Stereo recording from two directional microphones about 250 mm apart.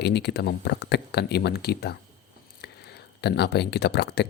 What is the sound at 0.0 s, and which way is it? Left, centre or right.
Speech, left.